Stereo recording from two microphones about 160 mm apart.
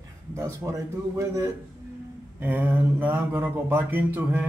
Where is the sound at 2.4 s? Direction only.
10° right (ahead or behind).